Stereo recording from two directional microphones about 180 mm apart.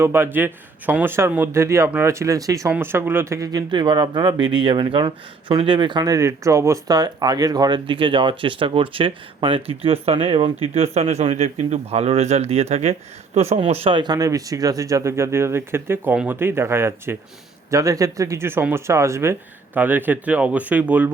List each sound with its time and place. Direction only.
0.0 s a man's voice: 15° right (ahead or behind)